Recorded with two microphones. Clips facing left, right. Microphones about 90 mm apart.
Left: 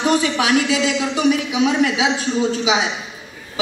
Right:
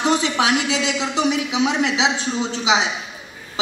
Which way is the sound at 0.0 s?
25° right (ahead or behind).